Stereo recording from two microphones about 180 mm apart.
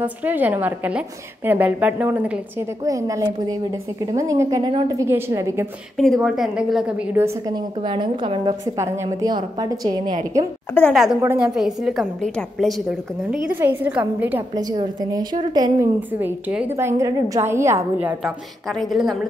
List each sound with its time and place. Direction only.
0.0 s a woman's voice: 10° right (ahead or behind)
2.8 s a woman's voice: 20° right (ahead or behind)
5.9 s a woman's voice: centre (ahead or behind); by 8.5 s 25° right (ahead or behind)
8.7 s a woman's voice: 15° right (ahead or behind)
10.7 s a woman's voice: 5° left (ahead or behind)
13.3 s a woman's voice: 10° right (ahead or behind)
14.5 s a woman's voice: 20° right (ahead or behind)
16.1 s a woman's voice: 10° right (ahead or behind)